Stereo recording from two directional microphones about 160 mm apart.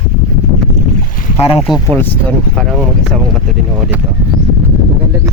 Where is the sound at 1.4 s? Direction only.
35° left (ahead or behind).